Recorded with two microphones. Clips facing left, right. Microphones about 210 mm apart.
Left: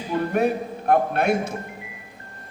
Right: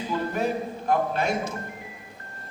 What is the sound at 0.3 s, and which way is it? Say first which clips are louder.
A man's voice: left 5 dB; 60° left (ahead or behind).